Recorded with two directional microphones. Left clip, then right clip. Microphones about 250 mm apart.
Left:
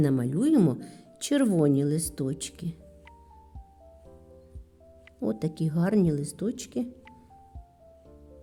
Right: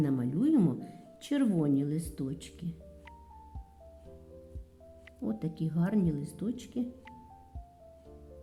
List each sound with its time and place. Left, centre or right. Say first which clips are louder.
0.0 s speech: left 5 dB; left
5.2 s speech: left 7 dB; left